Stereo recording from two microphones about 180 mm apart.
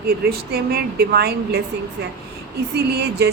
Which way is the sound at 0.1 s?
60° right (ahead or behind).